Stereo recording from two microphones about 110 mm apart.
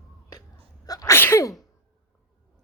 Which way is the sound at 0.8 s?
35° left (ahead or behind).